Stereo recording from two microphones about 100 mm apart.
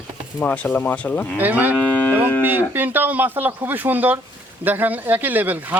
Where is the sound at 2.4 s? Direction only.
20° right (ahead or behind).